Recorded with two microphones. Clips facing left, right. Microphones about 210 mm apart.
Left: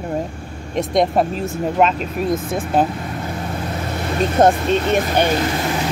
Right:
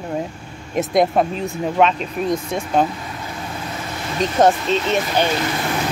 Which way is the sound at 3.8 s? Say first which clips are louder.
Left 2 dB; 55° left (ahead or behind).